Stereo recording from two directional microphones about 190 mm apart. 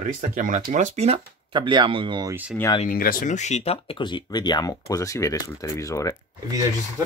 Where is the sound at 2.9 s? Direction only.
50° left (ahead or behind); by 6.1 s 15° left (ahead or behind).